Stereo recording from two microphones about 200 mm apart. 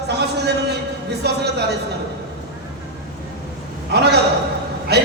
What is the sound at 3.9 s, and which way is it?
A man's voice, 55° right (ahead or behind).